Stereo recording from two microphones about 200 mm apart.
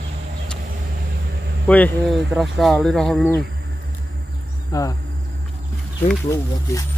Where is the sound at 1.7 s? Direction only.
5° left (ahead or behind).